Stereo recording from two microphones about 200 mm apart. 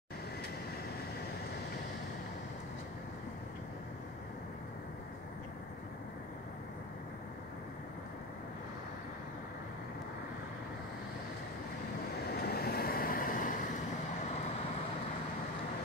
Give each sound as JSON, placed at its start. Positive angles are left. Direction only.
{"t": 12.3, "sound": "vehicle", "side_deg": 50}